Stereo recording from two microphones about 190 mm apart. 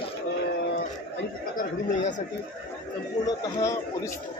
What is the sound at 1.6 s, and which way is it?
Speech, 40° left (ahead or behind).